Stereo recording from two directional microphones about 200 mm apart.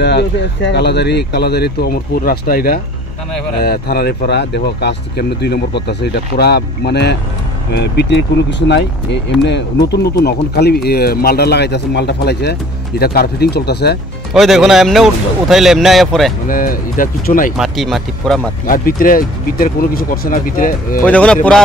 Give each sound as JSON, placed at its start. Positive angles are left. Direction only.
{"t": 0.0, "sound": "speech", "side_deg": 55}
{"t": 14.3, "sound": "speech", "side_deg": 0}
{"t": 16.4, "sound": "speech", "side_deg": 45}
{"t": 17.6, "sound": "speech", "side_deg": 0}
{"t": 18.7, "sound": "speech", "side_deg": 45}
{"t": 21.0, "sound": "speech", "side_deg": 5}